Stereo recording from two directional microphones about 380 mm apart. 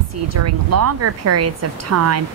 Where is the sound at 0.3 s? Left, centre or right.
Right.